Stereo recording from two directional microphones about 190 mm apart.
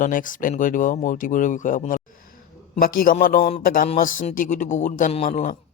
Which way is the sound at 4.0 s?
45° left (ahead or behind).